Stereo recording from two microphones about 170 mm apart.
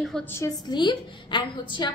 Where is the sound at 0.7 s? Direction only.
25° left (ahead or behind).